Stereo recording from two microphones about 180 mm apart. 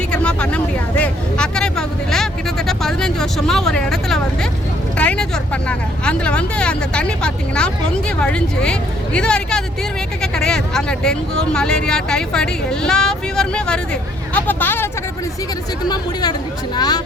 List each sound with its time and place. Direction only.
0.1 s vehicle: 5° left (ahead or behind)
4.9 s speech: 5° left (ahead or behind)
15.8 s speech: 25° left (ahead or behind)